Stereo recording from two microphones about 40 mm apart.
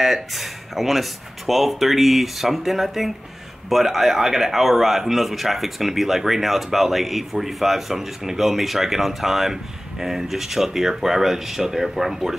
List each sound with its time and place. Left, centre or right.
0.0 s speech: centre